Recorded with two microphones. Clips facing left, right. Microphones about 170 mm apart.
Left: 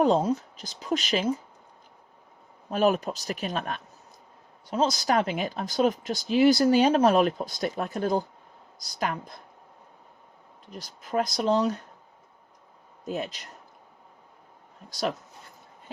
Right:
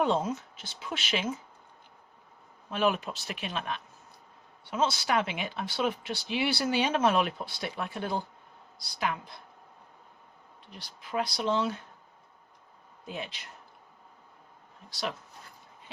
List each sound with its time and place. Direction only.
0.0 s speech: 35° left (ahead or behind)
2.6 s speech: 40° left (ahead or behind)
10.7 s speech: 45° left (ahead or behind)
13.1 s speech: 45° left (ahead or behind)
14.8 s speech: 45° left (ahead or behind)